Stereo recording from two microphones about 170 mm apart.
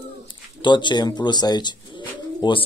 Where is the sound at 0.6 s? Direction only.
25° left (ahead or behind).